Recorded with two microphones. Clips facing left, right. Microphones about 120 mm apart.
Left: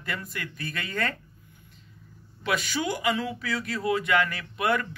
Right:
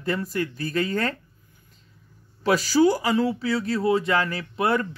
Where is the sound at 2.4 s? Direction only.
35° right (ahead or behind).